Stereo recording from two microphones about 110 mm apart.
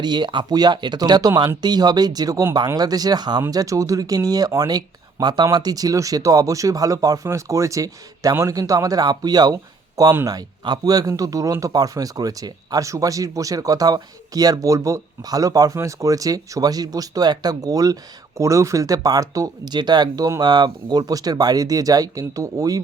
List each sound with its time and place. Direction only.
0.0 s speech: 40° right (ahead or behind)